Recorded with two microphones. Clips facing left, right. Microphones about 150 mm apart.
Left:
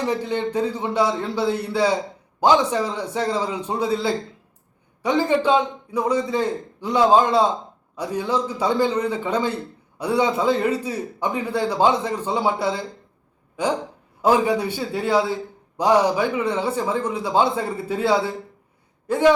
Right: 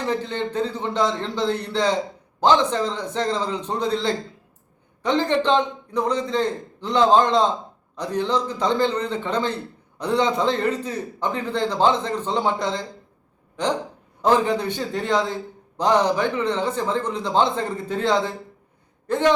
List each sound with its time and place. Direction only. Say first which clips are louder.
0.0 s a man's voice: left 2 dB; 10° left (ahead or behind)